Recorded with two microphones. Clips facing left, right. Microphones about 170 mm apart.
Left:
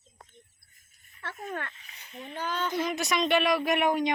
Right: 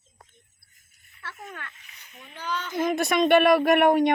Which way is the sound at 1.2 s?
40° left (ahead or behind).